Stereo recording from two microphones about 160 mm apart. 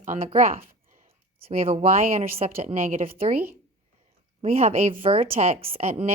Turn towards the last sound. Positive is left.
turn(degrees=-40)  # may be behind; listen again after turning